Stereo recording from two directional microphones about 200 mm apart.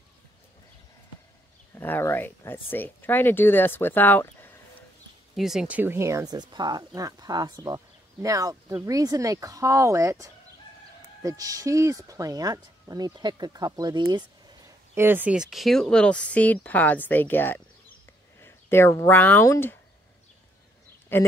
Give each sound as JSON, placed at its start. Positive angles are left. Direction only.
{"t": 1.8, "sound": "speech", "side_deg": 10}
{"t": 5.3, "sound": "speech", "side_deg": 0}
{"t": 21.1, "sound": "speech", "side_deg": 10}